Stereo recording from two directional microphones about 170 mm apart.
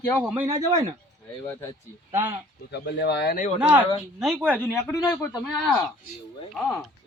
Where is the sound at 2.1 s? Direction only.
15° right (ahead or behind).